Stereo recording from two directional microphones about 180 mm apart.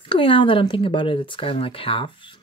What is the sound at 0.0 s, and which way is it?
Speech, 30° left (ahead or behind).